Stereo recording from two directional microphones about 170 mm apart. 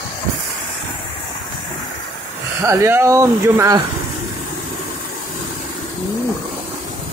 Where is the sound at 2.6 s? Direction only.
20° right (ahead or behind).